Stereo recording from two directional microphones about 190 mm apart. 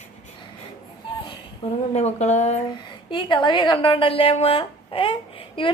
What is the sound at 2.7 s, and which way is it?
A woman's voice, 25° left (ahead or behind).